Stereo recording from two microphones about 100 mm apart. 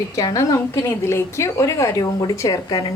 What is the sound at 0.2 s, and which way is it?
A woman's voice, 35° left (ahead or behind).